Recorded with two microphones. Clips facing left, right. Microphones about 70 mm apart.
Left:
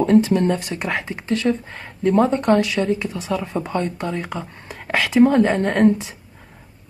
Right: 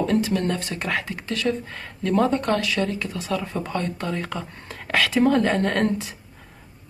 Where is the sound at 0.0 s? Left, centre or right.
Left.